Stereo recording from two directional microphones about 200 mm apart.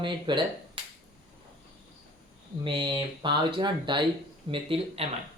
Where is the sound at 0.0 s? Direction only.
25° right (ahead or behind).